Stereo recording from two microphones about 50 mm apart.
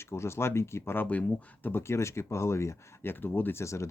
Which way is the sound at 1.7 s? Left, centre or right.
Left.